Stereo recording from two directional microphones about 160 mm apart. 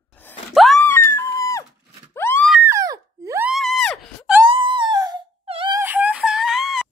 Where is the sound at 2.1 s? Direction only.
15° left (ahead or behind).